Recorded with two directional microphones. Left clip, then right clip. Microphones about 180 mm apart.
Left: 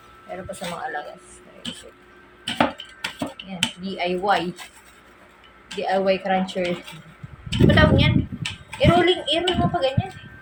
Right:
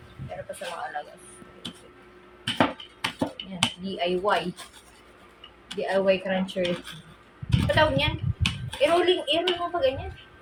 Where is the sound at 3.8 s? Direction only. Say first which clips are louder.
Left 2 dB; 20° left (ahead or behind).